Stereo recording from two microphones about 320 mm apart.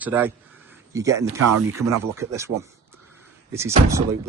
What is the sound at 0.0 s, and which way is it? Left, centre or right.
A man's voice, centre.